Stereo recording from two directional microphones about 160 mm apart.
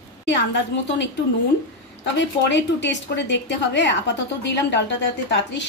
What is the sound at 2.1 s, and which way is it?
A woman's voice, 90° left.